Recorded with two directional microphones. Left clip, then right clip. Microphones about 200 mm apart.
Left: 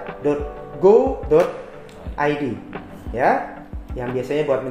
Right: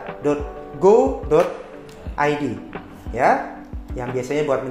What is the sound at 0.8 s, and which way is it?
Speech, 25° right (ahead or behind).